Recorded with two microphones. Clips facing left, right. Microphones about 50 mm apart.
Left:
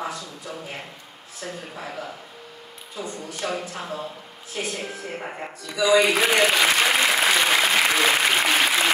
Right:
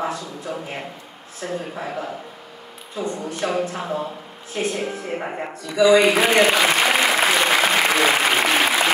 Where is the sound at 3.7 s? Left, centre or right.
Centre.